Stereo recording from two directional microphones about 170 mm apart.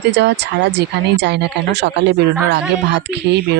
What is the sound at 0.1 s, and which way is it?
Speech, 85° right.